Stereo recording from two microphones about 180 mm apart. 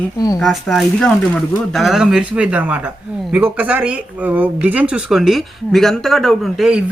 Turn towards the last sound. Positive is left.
turn(degrees=0)  # may be behind; listen again after turning